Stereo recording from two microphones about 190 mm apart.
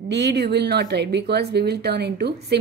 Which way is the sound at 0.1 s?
60° right (ahead or behind).